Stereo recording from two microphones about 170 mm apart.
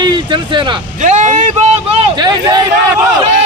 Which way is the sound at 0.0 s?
25° right (ahead or behind).